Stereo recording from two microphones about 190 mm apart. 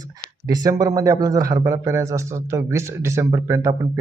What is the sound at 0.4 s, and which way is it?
A man's voice, 20° right (ahead or behind).